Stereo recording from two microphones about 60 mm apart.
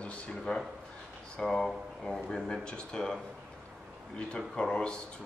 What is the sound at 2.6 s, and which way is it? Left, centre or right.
Speech, centre.